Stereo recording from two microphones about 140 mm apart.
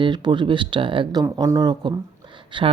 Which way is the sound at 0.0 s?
35° right (ahead or behind).